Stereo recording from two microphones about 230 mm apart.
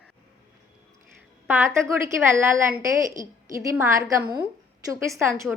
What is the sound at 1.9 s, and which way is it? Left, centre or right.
A woman's voice, centre.